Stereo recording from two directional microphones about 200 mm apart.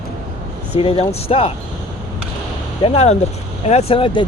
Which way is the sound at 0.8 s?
25° left (ahead or behind).